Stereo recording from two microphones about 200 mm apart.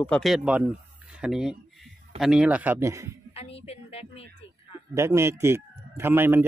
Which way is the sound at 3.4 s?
30° left (ahead or behind).